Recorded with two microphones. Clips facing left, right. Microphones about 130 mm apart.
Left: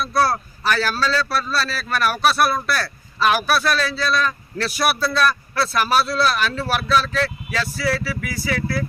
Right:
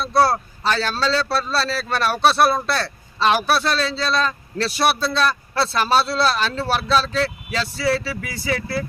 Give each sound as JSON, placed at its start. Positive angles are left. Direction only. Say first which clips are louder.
{"t": 0.0, "sound": "a man's voice", "louder": "right 2 dB", "side_deg": -25}